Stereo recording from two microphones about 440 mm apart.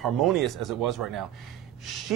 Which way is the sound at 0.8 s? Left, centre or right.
Right.